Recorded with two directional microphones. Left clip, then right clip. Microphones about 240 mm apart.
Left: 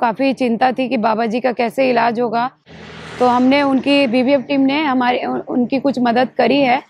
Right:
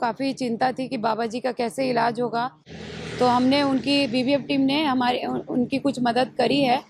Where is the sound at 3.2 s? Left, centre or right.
Left.